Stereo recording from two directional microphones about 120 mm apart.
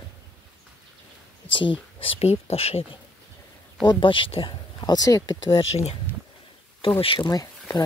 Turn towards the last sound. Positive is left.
turn(degrees=30)  # may be behind; listen again after turning